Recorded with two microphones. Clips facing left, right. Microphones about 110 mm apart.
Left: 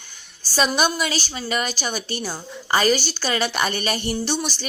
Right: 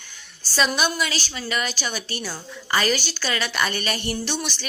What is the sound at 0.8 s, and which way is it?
A woman's voice, 45° left (ahead or behind).